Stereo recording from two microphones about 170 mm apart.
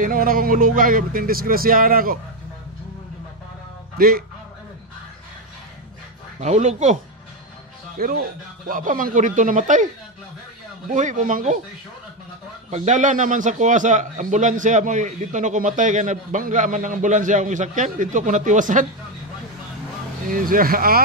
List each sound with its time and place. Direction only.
0.0 s speech: 55° right (ahead or behind)
6.4 s a man's voice: 40° right (ahead or behind)
8.0 s a man's voice: 60° right (ahead or behind)
10.9 s a man's voice: 45° right (ahead or behind)
12.6 s a man's voice: 40° right (ahead or behind)
20.2 s speech: 55° right (ahead or behind)